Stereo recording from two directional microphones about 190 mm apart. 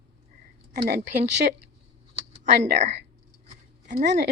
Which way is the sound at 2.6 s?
35° right (ahead or behind).